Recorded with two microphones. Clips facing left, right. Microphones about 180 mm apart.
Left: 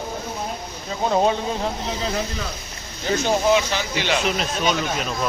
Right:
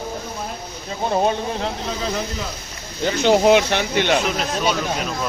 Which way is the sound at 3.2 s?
70° right (ahead or behind).